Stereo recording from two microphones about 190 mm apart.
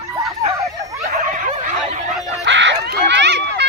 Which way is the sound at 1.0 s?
45° right (ahead or behind).